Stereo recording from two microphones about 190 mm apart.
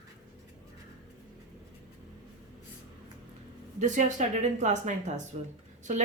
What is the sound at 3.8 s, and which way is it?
Speech, 40° right (ahead or behind).